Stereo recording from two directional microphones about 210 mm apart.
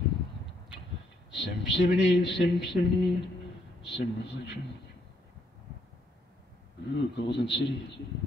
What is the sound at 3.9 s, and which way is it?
Speech, 55° left (ahead or behind).